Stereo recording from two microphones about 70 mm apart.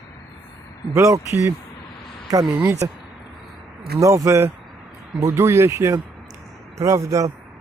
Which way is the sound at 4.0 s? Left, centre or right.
Right.